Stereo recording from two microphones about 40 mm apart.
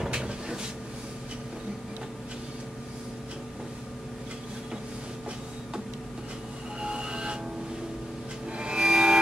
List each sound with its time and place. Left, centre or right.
0.0 s cupboard open or close: centre
6.8 s train: right
8.5 s music: right